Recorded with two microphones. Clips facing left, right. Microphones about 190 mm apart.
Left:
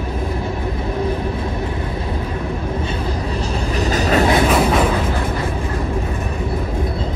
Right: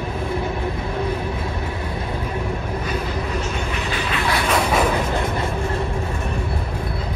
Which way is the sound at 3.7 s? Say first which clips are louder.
Left 8 dB; 40° left (ahead or behind).